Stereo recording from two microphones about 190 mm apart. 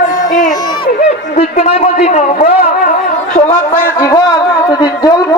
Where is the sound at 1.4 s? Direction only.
35° left (ahead or behind).